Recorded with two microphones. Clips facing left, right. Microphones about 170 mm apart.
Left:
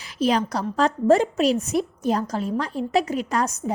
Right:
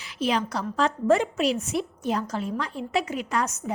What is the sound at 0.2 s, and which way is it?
A woman's voice, 40° left (ahead or behind).